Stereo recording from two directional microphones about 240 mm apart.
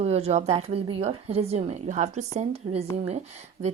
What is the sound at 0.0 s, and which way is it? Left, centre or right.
A woman's voice, right.